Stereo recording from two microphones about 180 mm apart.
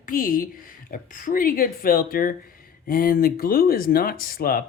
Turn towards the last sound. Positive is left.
turn(degrees=55)  # may be behind; listen again after turning